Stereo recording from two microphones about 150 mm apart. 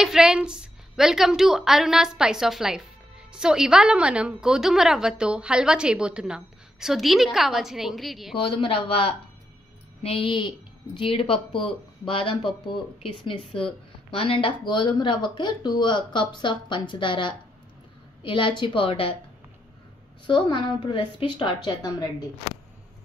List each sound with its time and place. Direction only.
0.0 s a woman's voice: 5° right (ahead or behind)
8.4 s speech: 35° left (ahead or behind)
20.2 s speech: 30° left (ahead or behind)